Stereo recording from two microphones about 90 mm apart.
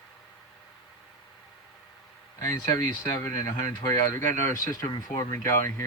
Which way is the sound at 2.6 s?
45° left (ahead or behind).